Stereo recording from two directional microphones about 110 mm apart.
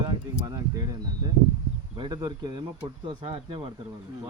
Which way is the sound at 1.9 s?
40° right (ahead or behind).